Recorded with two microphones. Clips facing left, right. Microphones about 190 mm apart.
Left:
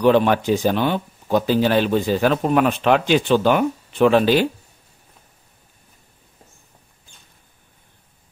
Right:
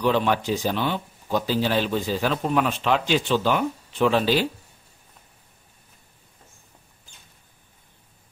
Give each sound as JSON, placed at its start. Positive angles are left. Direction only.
{"t": 0.0, "sound": "speech", "side_deg": 55}